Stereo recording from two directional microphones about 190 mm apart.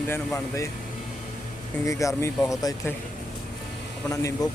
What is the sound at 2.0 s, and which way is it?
Speech, 15° left (ahead or behind).